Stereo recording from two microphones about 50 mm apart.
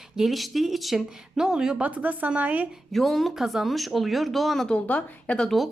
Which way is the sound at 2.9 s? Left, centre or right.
Centre.